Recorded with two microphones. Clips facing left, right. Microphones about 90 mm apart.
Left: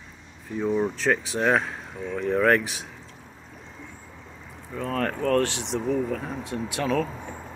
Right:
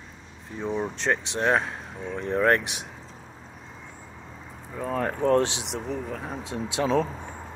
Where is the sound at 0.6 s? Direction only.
Centre (ahead or behind).